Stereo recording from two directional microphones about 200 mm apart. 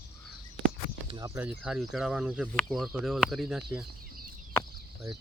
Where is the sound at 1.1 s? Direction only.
15° right (ahead or behind).